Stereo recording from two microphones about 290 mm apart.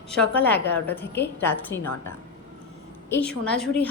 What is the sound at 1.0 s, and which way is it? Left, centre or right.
Speech, left.